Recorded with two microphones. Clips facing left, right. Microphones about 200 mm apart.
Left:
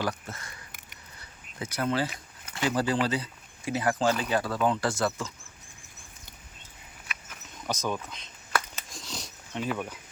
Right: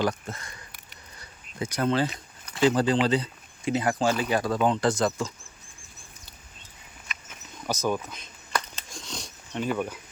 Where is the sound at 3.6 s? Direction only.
20° right (ahead or behind).